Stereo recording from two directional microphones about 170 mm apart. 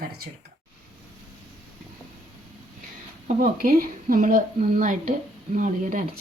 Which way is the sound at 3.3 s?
55° right (ahead or behind).